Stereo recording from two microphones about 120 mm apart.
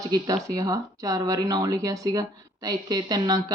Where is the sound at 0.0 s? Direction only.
30° right (ahead or behind).